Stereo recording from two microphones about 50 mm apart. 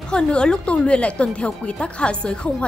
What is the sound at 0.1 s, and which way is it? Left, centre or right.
A woman's voice, centre.